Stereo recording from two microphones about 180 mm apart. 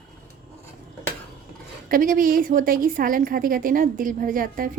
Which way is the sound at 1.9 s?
50° right (ahead or behind).